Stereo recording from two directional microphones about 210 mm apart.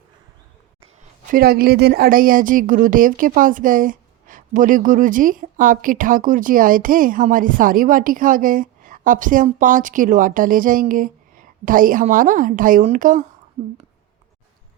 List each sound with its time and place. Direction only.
1.3 s speech: 45° right (ahead or behind)